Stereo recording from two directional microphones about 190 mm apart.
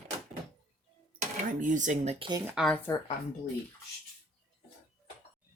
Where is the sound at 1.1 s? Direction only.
45° right (ahead or behind).